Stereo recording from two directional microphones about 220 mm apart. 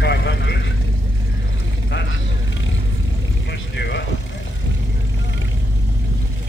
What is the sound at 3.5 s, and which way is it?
Vehicle, 50° left (ahead or behind).